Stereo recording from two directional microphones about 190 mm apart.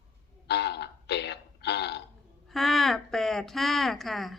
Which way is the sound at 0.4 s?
60° left (ahead or behind).